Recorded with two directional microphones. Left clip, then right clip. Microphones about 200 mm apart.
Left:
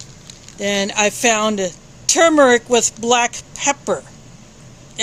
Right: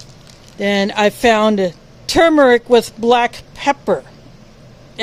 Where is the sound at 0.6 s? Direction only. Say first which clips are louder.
Right 3 dB; 20° right (ahead or behind).